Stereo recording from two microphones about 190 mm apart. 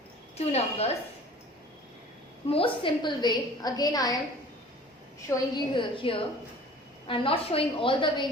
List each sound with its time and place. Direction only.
0.3 s a woman's voice: 35° left (ahead or behind)
2.5 s a woman's voice: 30° left (ahead or behind)
5.3 s a woman's voice: 25° left (ahead or behind)